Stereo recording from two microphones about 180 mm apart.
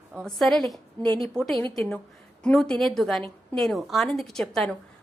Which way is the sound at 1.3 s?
5° left (ahead or behind).